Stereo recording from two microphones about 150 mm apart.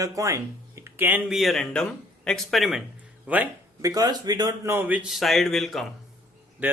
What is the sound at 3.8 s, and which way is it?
Speech, 25° right (ahead or behind).